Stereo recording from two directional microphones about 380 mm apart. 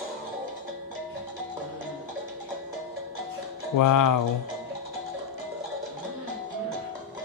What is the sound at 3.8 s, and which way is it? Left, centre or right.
Speech, left.